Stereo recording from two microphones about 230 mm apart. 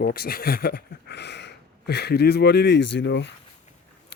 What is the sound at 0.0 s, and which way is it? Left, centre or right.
A man's voice, left.